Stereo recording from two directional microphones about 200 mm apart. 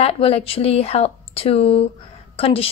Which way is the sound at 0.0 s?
30° left (ahead or behind).